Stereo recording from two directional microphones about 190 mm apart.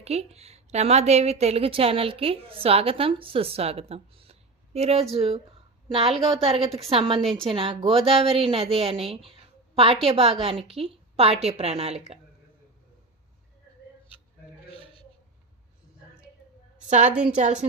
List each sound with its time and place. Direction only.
0.0 s a woman's voice: 35° right (ahead or behind)
17.3 s a woman's voice: 40° right (ahead or behind)